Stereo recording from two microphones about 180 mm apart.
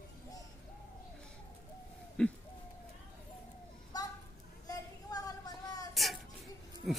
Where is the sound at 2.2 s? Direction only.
5° left (ahead or behind).